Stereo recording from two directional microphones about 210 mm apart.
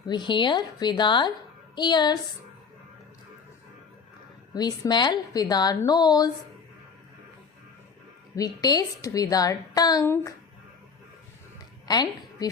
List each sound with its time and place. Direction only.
0.1 s a woman's voice: 20° left (ahead or behind)
4.5 s a woman's voice: 20° left (ahead or behind)
8.4 s a woman's voice: 15° left (ahead or behind)
11.9 s a woman's voice: 20° left (ahead or behind)